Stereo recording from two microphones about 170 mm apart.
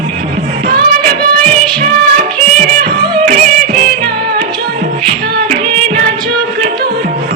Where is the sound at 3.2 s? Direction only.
45° right (ahead or behind).